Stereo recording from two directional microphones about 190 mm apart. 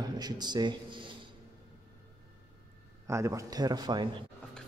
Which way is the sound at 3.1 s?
15° right (ahead or behind).